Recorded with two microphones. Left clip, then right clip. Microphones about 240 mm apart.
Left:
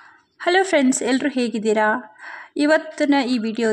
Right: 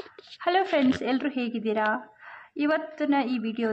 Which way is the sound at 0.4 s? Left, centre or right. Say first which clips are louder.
Left 6 dB; left.